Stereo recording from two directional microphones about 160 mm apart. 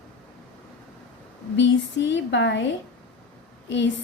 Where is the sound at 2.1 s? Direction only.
90° left.